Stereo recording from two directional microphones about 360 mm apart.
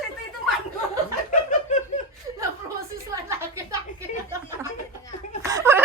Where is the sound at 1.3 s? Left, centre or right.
Centre.